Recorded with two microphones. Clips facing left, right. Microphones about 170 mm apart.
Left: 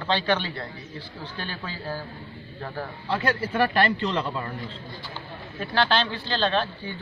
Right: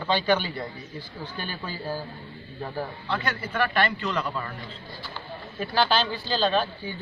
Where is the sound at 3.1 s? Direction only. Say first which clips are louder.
Left 7 dB; 35° left (ahead or behind).